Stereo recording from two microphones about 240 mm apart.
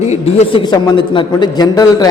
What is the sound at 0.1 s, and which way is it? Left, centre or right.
A man's voice, left.